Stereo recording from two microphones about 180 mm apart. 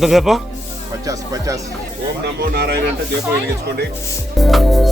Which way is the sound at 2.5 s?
65° right (ahead or behind).